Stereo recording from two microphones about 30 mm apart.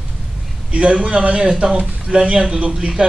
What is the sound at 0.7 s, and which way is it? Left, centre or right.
Speech, right.